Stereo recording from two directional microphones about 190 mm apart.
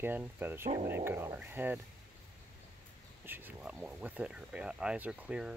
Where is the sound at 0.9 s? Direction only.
10° right (ahead or behind).